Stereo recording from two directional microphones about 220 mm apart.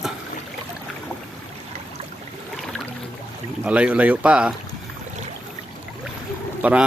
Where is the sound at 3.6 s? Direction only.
5° right (ahead or behind).